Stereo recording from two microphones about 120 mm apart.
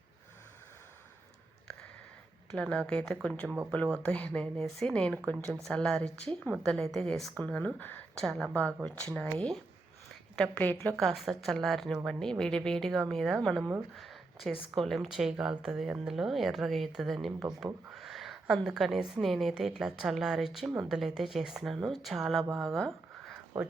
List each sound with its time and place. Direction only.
2.6 s speech: 10° left (ahead or behind)
8.2 s a woman's voice: 5° left (ahead or behind)
10.4 s speech: 10° left (ahead or behind)
11.0 s a woman's voice: centre (ahead or behind)
13.9 s a sound: centre (ahead or behind)
14.8 s a woman's voice: centre (ahead or behind)
23.5 s speech: 15° right (ahead or behind)